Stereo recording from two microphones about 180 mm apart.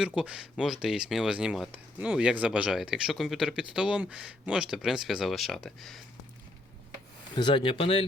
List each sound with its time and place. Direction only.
0.0 s speech: 5° right (ahead or behind)
7.3 s speech: 25° left (ahead or behind)